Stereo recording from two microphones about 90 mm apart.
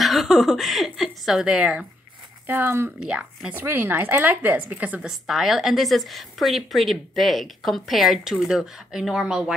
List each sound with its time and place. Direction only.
0.0 s speech: centre (ahead or behind)
2.4 s speech: 20° right (ahead or behind)
3.0 s speech: 10° right (ahead or behind)
3.5 s a woman's voice: 25° right (ahead or behind)
5.1 s a woman's voice: 5° right (ahead or behind)